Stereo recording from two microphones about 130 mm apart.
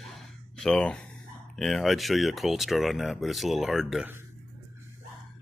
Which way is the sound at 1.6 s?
Centre (ahead or behind).